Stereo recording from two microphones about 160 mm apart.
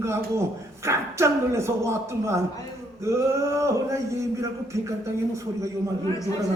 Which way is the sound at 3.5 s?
20° right (ahead or behind).